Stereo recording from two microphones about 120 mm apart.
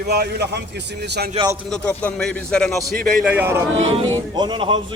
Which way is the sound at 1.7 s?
10° left (ahead or behind).